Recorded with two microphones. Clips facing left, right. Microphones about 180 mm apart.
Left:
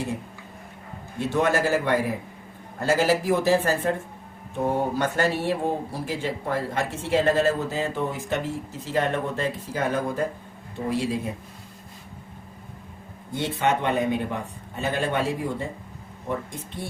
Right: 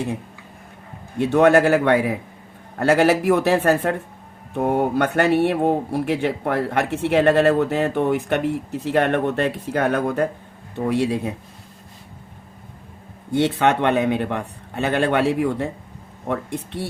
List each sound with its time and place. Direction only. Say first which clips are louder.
1.2 s a man's voice: right 8 dB; 65° right (ahead or behind)
13.3 s a man's voice: right 6 dB; 75° right (ahead or behind)